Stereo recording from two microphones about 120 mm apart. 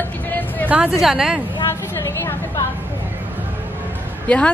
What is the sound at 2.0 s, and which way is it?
Speech, 20° left (ahead or behind).